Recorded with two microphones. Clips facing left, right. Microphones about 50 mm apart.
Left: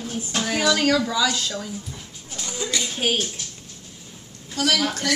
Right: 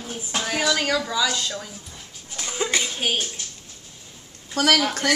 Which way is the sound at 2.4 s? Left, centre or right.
Right.